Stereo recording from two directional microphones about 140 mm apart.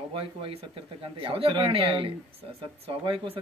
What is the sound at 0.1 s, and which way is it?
Speech, 40° right (ahead or behind).